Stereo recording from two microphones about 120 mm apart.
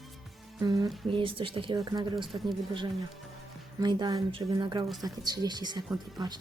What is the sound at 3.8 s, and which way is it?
Speech, 35° right (ahead or behind).